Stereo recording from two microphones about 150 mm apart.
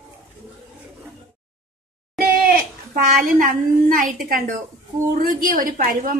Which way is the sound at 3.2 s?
65° right (ahead or behind).